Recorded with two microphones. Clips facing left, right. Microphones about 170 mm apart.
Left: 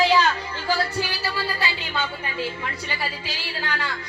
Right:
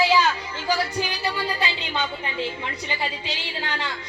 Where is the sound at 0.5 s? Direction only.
15° right (ahead or behind).